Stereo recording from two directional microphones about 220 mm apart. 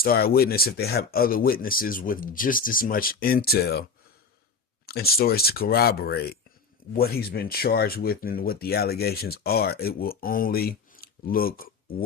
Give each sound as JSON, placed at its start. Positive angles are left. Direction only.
{"t": 0.0, "sound": "speech", "side_deg": 45}
{"t": 4.9, "sound": "speech", "side_deg": 45}